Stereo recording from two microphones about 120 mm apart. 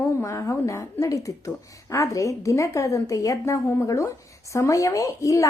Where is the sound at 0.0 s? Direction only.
25° left (ahead or behind).